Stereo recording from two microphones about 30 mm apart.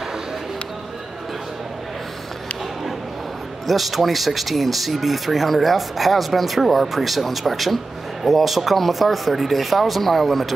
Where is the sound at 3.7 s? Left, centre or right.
Centre.